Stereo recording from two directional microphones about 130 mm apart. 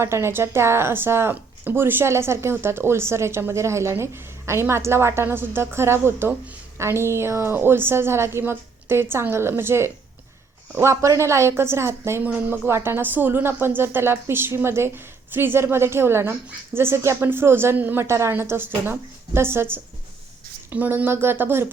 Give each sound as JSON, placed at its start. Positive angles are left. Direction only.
{"t": 0.0, "sound": "a woman's voice", "side_deg": -20}